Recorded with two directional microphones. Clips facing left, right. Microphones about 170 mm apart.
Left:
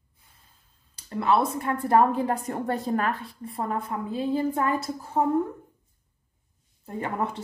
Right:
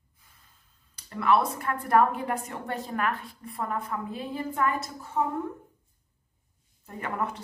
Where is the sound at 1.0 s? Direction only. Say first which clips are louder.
Left 1 dB; 25° left (ahead or behind).